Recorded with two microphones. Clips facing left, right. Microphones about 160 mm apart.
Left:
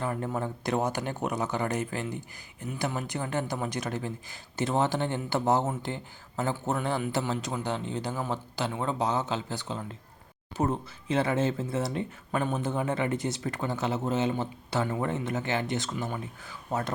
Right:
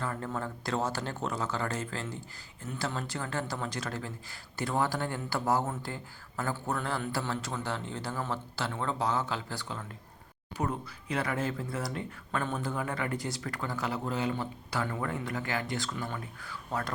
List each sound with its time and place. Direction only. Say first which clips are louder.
0.0 s speech: left 4 dB; 20° left (ahead or behind)